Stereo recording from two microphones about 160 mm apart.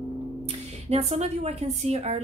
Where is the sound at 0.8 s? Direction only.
40° right (ahead or behind).